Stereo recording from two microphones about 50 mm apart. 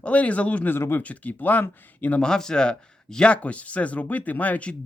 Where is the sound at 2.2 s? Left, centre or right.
Centre; by 4.7 s left.